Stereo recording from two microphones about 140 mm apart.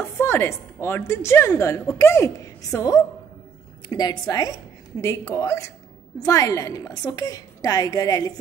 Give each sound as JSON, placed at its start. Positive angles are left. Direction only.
{"t": 0.2, "sound": "a woman's voice", "side_deg": 15}